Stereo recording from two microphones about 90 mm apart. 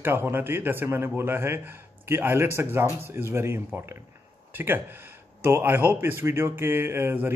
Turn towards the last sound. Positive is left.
turn(degrees=-25)  # may be behind; listen again after turning